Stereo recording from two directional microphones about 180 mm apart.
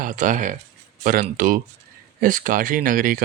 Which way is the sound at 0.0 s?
45° right (ahead or behind).